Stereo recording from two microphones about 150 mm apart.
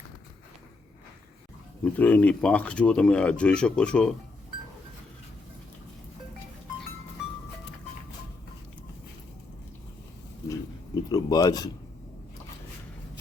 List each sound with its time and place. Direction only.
1.8 s speech: 10° left (ahead or behind)
11.1 s speech: 25° left (ahead or behind)